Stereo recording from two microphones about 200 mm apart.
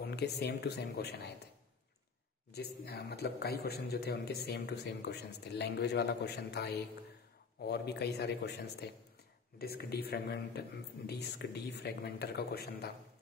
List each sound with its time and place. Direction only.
0.0 s speech: 55° left (ahead or behind)
2.5 s a man's voice: 55° left (ahead or behind)